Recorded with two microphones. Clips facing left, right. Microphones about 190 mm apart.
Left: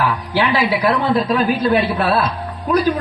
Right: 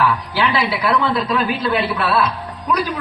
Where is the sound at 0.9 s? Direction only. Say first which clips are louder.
Left 1 dB; 35° left (ahead or behind).